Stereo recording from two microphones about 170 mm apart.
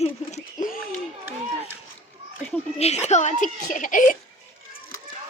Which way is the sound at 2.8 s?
40° left (ahead or behind).